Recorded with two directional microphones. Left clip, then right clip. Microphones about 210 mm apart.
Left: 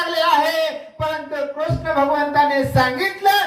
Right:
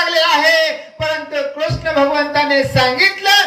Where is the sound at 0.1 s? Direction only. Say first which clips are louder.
Right 3 dB; 30° left (ahead or behind).